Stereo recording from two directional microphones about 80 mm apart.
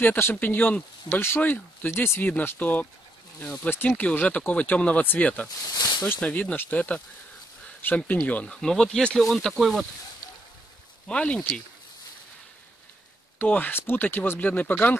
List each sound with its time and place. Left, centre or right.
0.0 s speech: left
8.5 s speech: centre
11.1 s speech: centre
13.4 s speech: left